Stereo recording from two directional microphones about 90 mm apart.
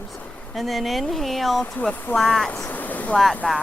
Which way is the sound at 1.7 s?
15° left (ahead or behind).